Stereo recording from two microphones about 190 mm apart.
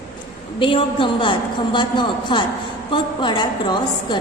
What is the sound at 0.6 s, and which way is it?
A woman's voice, 25° left (ahead or behind).